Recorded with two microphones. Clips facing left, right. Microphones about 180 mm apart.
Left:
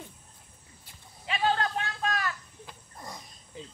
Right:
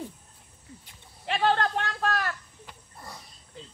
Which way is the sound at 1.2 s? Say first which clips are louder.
Right 3 dB; 65° right (ahead or behind).